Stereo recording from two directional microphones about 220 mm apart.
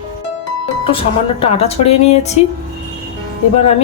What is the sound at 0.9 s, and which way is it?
Speech, 25° left (ahead or behind).